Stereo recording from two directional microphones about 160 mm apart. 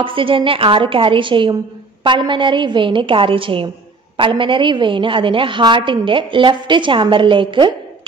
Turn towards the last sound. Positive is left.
turn(degrees=-30)  # may be behind; listen again after turning